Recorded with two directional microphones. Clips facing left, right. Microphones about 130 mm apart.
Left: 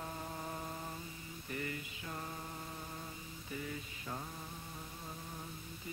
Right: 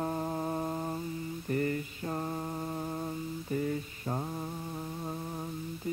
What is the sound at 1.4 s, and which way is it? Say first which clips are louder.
Mantra: right 11 dB; 45° right (ahead or behind).